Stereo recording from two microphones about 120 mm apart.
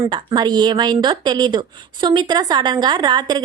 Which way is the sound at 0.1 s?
40° right (ahead or behind).